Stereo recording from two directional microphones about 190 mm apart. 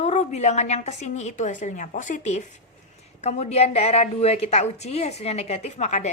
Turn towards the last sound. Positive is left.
turn(degrees=40)  # may be behind; listen again after turning